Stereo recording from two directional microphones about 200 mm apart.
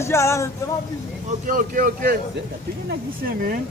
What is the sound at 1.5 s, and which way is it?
Speech, 45° right (ahead or behind).